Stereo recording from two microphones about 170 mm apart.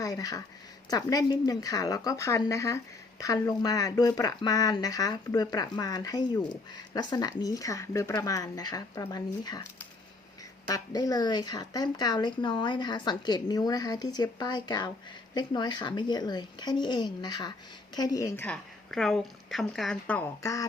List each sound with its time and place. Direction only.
0.0 s a woman's voice: 20° left (ahead or behind)
10.7 s a woman's voice: 20° left (ahead or behind)
18.4 s speech: 5° left (ahead or behind)
20.4 s a woman's voice: 20° left (ahead or behind)